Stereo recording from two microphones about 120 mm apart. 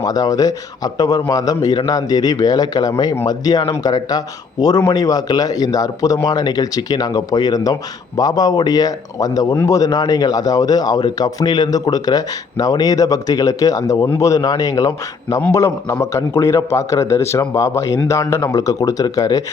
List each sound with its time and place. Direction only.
0.0 s speech: 30° left (ahead or behind)